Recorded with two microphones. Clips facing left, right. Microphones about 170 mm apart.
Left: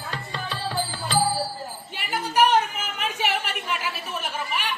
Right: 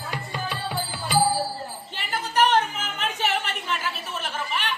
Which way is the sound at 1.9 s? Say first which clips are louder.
Left 1 dB; 10° left (ahead or behind).